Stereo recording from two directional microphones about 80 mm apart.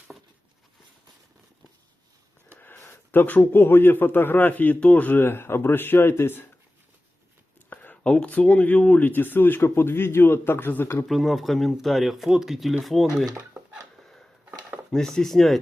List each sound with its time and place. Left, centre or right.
2.6 s speech: left
7.7 s a sound: left
8.1 s speech: centre
11.1 s speech: centre
14.0 s a sound: centre
14.8 s speech: centre